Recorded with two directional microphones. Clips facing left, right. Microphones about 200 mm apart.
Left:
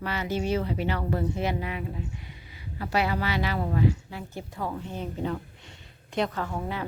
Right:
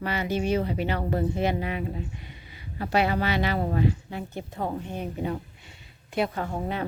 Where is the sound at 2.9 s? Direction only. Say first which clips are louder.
Right 3 dB; 25° right (ahead or behind); by 6.4 s 5° right (ahead or behind).